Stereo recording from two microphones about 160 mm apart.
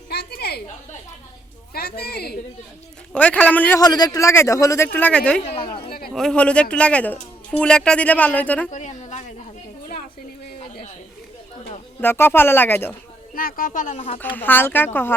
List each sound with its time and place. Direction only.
0.1 s a sound: 85° left
1.7 s a woman's voice: 80° left
3.1 s a man's voice: 10° left (ahead or behind)
3.8 s speech: 25° left (ahead or behind); by 5.4 s 5° left (ahead or behind)
5.4 s speech: 40° left (ahead or behind)
6.1 s a man's voice: 5° left (ahead or behind)
8.7 s a sound: 50° left (ahead or behind)
11.9 s a man's voice: 15° left (ahead or behind)
13.3 s speech: 60° left (ahead or behind)
14.2 s a man's voice: 10° left (ahead or behind)